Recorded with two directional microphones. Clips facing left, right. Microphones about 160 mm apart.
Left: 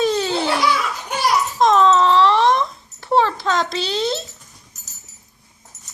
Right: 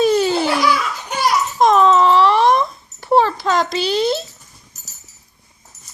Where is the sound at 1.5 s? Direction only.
10° right (ahead or behind).